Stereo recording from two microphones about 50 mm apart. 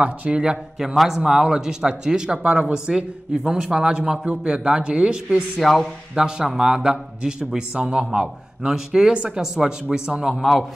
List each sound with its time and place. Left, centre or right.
0.0 s speech: right
0.7 s speech: centre
5.6 s a man's voice: centre
6.1 s speech: centre
9.1 s speech: right
9.4 s speech: centre
10.3 s a man's voice: centre